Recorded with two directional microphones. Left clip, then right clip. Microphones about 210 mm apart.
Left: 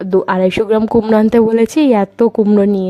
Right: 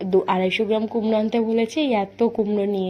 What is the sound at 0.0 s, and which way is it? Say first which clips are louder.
Speech: left 6 dB; 45° left (ahead or behind).